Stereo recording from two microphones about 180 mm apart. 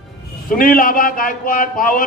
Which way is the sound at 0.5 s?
50° left (ahead or behind).